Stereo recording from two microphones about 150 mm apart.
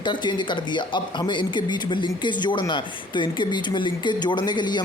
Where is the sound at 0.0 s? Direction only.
30° left (ahead or behind).